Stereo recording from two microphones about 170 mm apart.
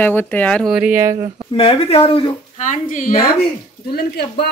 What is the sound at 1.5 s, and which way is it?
Speech, 30° left (ahead or behind).